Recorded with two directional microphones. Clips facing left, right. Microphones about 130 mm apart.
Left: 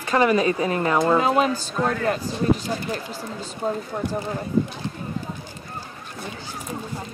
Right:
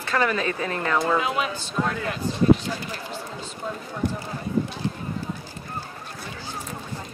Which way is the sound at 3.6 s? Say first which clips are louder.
Left 8 dB; 40° left (ahead or behind).